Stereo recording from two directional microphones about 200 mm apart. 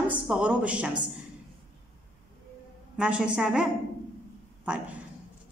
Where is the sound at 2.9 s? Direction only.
5° right (ahead or behind).